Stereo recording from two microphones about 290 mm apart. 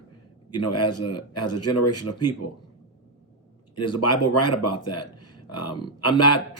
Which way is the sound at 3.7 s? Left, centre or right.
Left.